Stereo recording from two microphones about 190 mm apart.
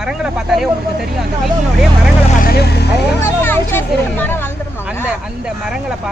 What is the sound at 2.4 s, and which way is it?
Vehicle, 55° left (ahead or behind).